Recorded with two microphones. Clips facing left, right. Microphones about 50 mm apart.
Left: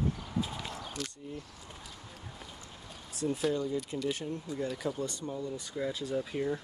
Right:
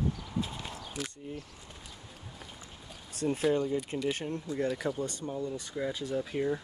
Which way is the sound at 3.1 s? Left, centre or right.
Right.